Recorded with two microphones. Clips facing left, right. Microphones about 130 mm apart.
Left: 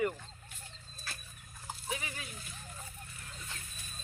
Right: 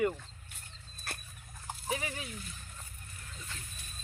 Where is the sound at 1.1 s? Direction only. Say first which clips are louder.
Right 3 dB; 60° right (ahead or behind).